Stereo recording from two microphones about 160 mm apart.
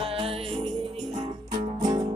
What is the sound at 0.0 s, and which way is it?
Music, 35° right (ahead or behind).